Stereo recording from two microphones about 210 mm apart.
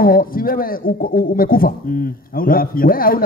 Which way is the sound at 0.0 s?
45° left (ahead or behind).